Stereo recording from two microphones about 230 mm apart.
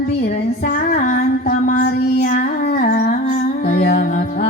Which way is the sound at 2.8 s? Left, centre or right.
Left.